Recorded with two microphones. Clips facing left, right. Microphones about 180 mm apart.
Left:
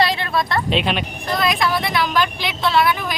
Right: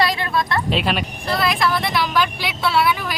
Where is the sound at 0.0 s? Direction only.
25° left (ahead or behind).